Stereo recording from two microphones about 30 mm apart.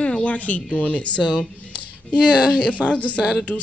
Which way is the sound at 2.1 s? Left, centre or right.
Left.